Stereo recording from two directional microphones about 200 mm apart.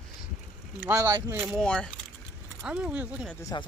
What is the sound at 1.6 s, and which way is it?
Speech, 5° left (ahead or behind).